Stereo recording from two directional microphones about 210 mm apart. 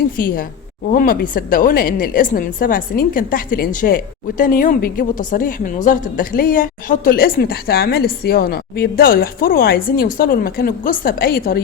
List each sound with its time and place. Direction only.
0.9 s a woman's voice: 40° left (ahead or behind)